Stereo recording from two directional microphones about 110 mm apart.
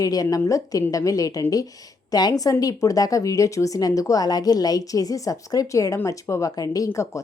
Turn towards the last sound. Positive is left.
turn(degrees=30)  # may be behind; listen again after turning